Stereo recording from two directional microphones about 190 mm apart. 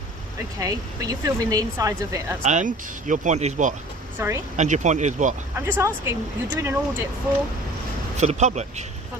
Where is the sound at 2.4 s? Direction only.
40° right (ahead or behind).